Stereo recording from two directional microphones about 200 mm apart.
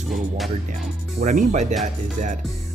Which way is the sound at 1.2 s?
40° right (ahead or behind).